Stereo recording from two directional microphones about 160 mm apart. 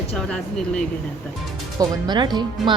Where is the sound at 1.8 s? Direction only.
25° right (ahead or behind).